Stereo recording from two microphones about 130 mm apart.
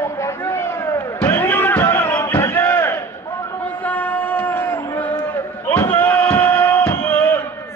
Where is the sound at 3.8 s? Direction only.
10° left (ahead or behind).